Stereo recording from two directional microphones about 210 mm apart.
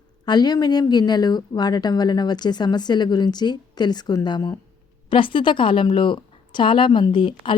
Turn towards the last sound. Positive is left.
turn(degrees=20)  # may be behind; listen again after turning